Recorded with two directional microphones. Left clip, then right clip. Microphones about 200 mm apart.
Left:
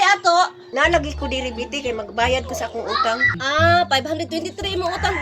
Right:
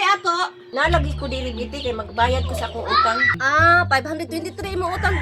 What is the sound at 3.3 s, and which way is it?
A woman's voice, 5° left (ahead or behind).